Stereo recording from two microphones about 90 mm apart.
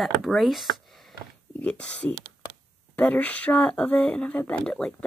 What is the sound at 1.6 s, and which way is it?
Speech, 15° left (ahead or behind).